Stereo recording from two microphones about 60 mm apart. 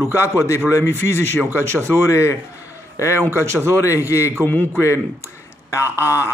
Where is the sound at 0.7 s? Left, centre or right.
Left.